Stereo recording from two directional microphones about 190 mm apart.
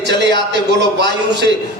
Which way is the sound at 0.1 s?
65° right (ahead or behind).